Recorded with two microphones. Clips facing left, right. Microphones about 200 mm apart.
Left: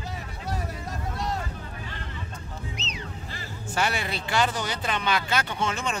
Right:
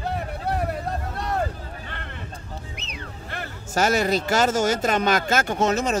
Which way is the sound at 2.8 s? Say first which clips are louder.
Even; 55° right (ahead or behind).